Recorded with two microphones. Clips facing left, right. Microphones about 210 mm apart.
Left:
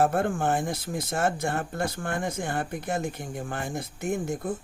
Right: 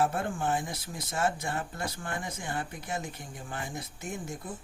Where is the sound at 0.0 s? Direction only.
55° left (ahead or behind).